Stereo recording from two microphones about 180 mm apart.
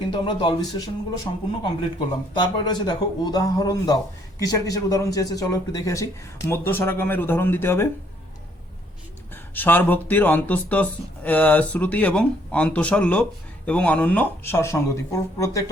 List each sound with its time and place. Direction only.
0.1 s a man's voice: 30° left (ahead or behind)
2.0 s a man's voice: 25° left (ahead or behind)
9.3 s speech: 10° left (ahead or behind)